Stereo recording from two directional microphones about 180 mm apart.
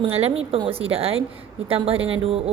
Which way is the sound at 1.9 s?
90° right.